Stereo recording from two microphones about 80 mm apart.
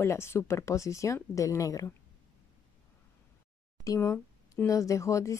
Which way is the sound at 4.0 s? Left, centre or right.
Left.